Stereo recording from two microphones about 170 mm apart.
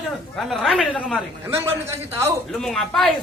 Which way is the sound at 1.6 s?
15° right (ahead or behind).